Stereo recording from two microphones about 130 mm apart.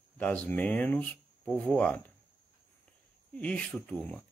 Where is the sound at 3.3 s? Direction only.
10° left (ahead or behind).